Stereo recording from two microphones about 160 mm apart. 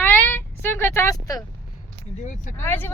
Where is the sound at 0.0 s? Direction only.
10° left (ahead or behind).